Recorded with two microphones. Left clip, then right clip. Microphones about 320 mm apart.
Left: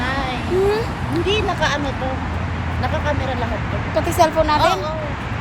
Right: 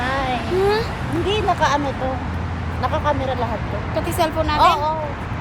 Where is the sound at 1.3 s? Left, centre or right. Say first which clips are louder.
Right 2 dB; right.